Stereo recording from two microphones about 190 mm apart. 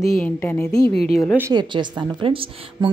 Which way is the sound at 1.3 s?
15° right (ahead or behind).